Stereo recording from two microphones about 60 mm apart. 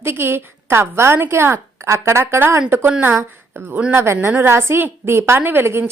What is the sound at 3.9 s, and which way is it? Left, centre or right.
A woman's voice, right.